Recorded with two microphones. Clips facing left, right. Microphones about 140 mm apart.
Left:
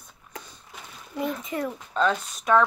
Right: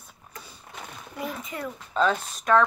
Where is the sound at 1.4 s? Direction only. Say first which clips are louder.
Left 5 dB; 30° left (ahead or behind).